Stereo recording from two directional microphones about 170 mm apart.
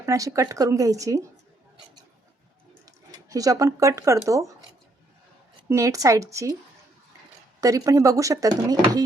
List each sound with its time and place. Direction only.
0.0 s speech: 20° right (ahead or behind)
2.8 s speech: 20° right (ahead or behind)
5.6 s speech: 15° right (ahead or behind)
7.6 s speech: 20° right (ahead or behind)